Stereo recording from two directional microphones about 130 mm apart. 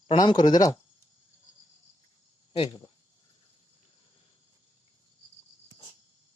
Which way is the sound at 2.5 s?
40° left (ahead or behind).